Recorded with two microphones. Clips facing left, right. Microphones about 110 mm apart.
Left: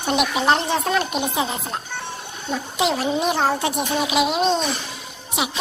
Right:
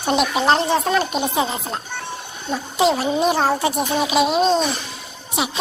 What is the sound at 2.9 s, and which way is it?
Speech, 10° right (ahead or behind).